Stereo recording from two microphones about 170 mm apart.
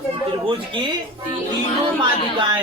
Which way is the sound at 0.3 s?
30° right (ahead or behind).